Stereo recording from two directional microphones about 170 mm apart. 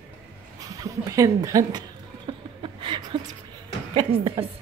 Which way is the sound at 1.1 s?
20° right (ahead or behind).